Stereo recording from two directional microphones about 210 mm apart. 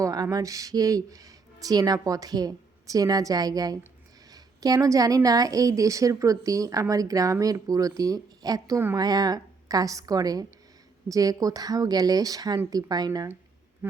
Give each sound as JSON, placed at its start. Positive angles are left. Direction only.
{"t": 0.0, "sound": "a woman's voice", "side_deg": -15}